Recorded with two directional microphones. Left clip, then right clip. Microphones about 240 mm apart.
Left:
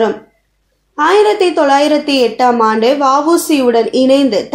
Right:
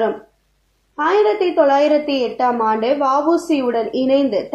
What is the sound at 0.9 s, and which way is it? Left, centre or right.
A woman's voice, left.